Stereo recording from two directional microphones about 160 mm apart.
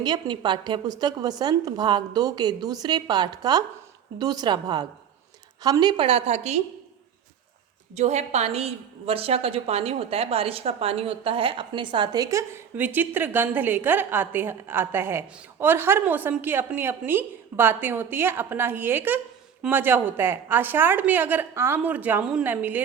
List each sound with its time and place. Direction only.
0.0 s a woman's voice: 25° right (ahead or behind); by 6.6 s 45° right (ahead or behind)
7.9 s a woman's voice: 45° right (ahead or behind); by 22.8 s 10° right (ahead or behind)